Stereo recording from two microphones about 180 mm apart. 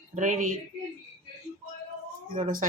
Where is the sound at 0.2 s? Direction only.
45° right (ahead or behind).